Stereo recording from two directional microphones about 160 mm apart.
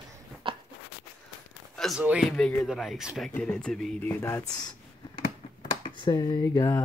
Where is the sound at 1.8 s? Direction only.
5° right (ahead or behind); by 4.7 s 15° left (ahead or behind).